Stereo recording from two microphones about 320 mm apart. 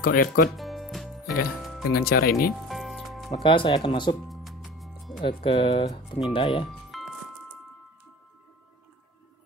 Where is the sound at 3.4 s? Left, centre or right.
Centre.